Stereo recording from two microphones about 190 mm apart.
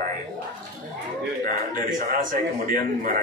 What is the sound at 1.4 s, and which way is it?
A man's voice, 45° right (ahead or behind).